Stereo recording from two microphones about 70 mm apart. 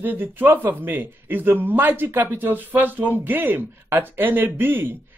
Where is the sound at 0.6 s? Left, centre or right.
Right.